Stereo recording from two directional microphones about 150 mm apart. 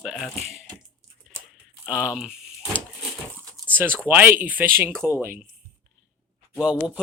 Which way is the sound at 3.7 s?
15° right (ahead or behind).